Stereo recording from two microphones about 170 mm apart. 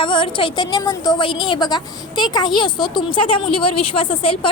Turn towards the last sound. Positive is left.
turn(degrees=30)  # may be behind; listen again after turning